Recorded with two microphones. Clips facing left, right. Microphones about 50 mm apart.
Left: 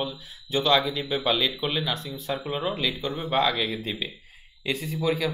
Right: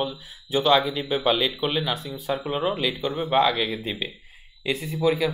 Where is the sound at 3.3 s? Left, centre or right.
Centre.